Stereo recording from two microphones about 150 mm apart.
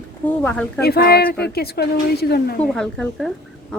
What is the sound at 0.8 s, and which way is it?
Speech, 90° left.